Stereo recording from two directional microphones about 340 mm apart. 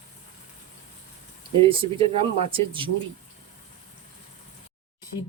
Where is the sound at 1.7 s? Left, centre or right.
Centre.